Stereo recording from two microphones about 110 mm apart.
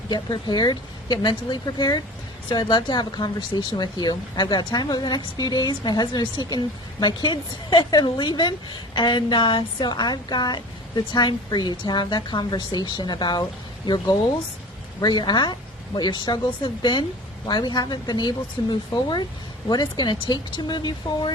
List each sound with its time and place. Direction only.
0.1 s speech: 40° left (ahead or behind)